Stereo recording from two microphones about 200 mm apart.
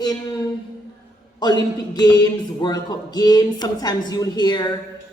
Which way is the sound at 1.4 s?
20° left (ahead or behind).